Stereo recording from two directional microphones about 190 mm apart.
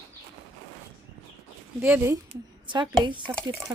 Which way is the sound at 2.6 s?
25° right (ahead or behind).